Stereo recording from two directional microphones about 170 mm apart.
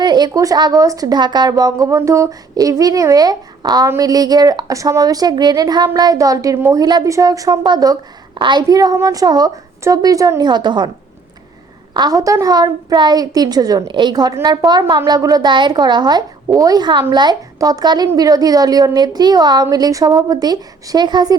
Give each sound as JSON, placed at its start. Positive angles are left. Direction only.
{"t": 0.0, "sound": "a woman's voice", "side_deg": -25}
{"t": 11.9, "sound": "a woman's voice", "side_deg": -20}